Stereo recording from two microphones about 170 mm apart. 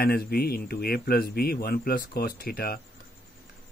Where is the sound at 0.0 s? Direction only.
65° left (ahead or behind).